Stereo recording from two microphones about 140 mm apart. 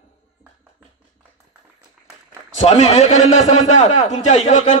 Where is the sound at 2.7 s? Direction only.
50° left (ahead or behind).